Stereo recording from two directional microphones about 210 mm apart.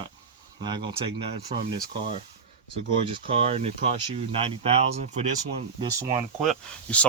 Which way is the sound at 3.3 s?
30° right (ahead or behind).